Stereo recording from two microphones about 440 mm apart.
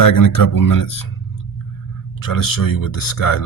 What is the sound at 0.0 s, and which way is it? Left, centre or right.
Speech, left.